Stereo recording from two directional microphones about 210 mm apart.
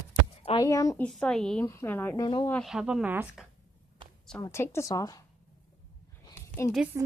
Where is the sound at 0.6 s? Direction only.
15° left (ahead or behind).